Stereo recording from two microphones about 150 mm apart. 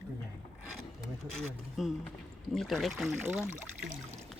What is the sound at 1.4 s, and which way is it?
Speech, 5° left (ahead or behind).